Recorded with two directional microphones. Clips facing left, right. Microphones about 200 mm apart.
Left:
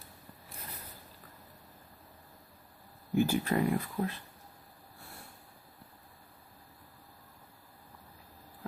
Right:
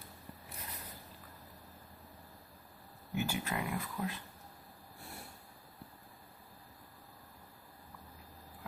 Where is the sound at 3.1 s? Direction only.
35° left (ahead or behind).